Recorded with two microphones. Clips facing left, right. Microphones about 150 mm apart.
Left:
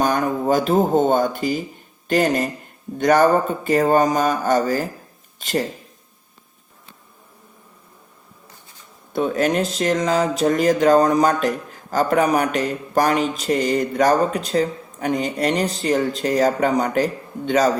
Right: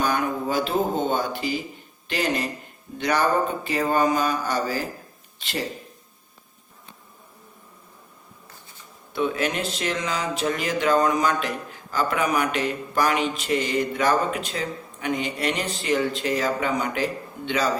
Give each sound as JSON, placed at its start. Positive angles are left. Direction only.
{"t": 0.0, "sound": "speech", "side_deg": 40}
{"t": 9.1, "sound": "speech", "side_deg": 40}